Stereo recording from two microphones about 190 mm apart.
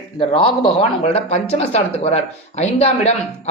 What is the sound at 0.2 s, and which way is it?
Speech, 30° left (ahead or behind).